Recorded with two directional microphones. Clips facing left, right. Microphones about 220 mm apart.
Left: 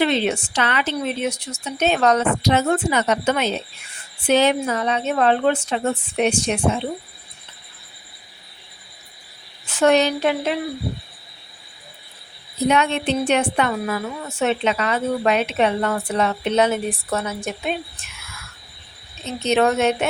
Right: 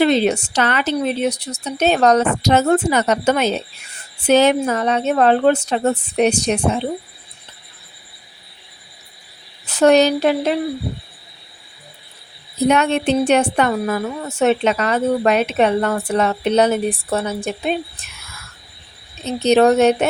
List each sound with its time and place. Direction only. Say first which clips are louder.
0.0 s a woman's voice: right 5 dB; 40° right (ahead or behind)
9.6 s a woman's voice: right 4 dB; 40° right (ahead or behind)
12.6 s a woman's voice: right 4 dB; 45° right (ahead or behind)
19.2 s a woman's voice: right 5 dB; 35° right (ahead or behind)